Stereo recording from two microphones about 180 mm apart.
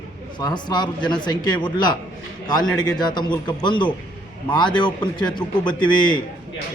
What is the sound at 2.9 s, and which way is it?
Speech, 25° left (ahead or behind).